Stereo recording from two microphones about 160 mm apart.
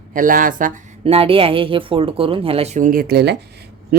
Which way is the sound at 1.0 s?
40° right (ahead or behind).